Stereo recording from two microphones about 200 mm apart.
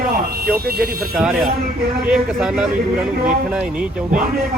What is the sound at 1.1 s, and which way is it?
Speech, centre (ahead or behind).